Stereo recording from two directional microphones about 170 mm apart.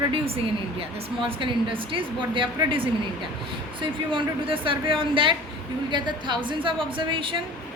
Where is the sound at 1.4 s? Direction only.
30° right (ahead or behind).